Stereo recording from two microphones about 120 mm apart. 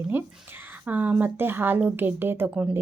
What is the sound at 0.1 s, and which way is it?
A woman's voice, 20° right (ahead or behind).